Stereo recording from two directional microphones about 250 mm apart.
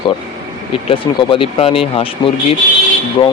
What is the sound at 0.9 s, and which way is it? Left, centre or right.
Speech, left.